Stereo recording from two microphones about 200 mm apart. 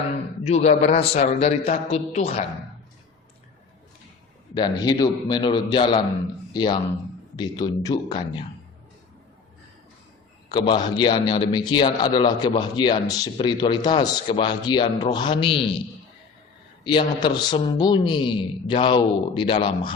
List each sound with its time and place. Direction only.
0.4 s a man's voice: 35° left (ahead or behind)
4.5 s a man's voice: 20° left (ahead or behind)
10.5 s a man's voice: 20° left (ahead or behind)
16.8 s a man's voice: 25° left (ahead or behind)